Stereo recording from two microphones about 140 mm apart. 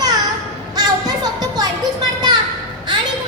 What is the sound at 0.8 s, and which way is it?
Music, 30° right (ahead or behind).